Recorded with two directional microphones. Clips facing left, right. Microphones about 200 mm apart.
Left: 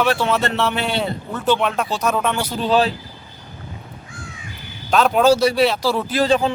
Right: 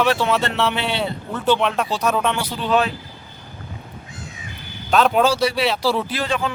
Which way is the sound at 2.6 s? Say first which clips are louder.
Left 2 dB; 35° left (ahead or behind).